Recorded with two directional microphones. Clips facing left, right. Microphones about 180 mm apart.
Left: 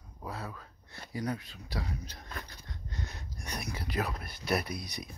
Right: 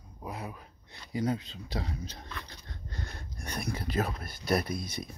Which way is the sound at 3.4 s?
30° right (ahead or behind).